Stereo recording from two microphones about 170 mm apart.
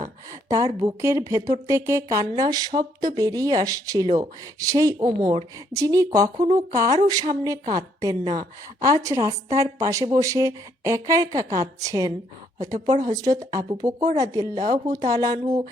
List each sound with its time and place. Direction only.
0.4 s speech: 20° right (ahead or behind)